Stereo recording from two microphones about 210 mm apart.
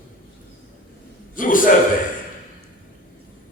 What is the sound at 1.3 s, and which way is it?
Speech, 40° left (ahead or behind).